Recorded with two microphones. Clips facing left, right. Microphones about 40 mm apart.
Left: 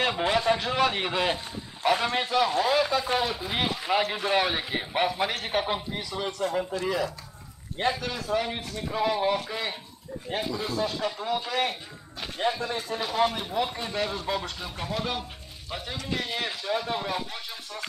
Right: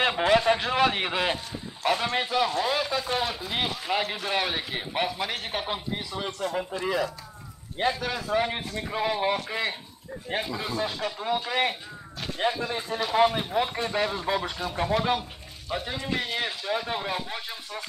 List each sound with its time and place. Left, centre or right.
0.3 s a man's voice: centre
7.7 s speech: centre
15.7 s a man's voice: centre